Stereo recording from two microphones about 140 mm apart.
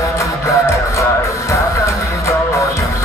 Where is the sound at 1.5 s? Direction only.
20° left (ahead or behind).